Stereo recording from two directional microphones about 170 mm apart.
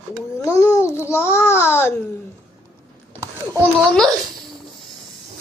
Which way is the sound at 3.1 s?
15° right (ahead or behind).